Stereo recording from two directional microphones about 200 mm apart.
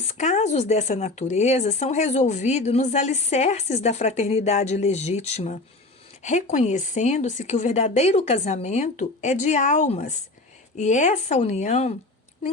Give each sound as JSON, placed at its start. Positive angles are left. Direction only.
{"t": 0.2, "sound": "speech", "side_deg": 35}